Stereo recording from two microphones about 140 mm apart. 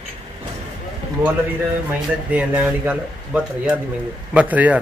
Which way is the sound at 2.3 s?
10° right (ahead or behind).